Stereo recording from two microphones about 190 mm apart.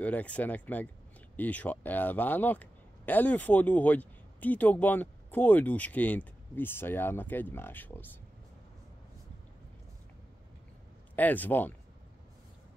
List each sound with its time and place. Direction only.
0.0 s speech: 5° left (ahead or behind)
11.1 s speech: 10° left (ahead or behind)